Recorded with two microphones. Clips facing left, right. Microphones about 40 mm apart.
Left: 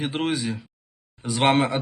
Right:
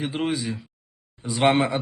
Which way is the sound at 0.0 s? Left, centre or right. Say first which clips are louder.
Left 1 dB; left.